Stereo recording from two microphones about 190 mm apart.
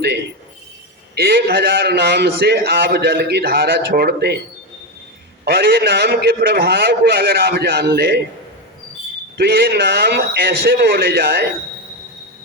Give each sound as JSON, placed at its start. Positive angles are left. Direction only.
{"t": 1.1, "sound": "a man's voice", "side_deg": -55}
{"t": 5.5, "sound": "a man's voice", "side_deg": -55}
{"t": 9.4, "sound": "a man's voice", "side_deg": -55}